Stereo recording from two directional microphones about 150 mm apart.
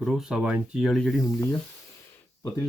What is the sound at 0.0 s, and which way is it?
Speech, 5° right (ahead or behind).